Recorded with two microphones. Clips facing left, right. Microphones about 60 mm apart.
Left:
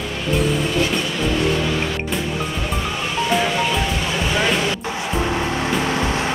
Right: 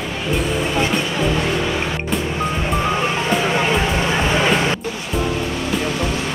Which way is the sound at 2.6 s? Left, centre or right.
Right.